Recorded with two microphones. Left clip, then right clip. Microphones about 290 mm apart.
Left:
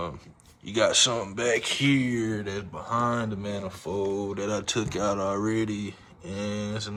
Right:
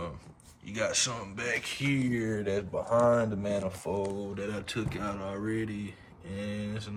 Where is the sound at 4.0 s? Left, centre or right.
Centre.